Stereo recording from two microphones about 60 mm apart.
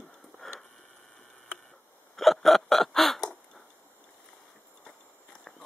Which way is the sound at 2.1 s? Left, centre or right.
Centre.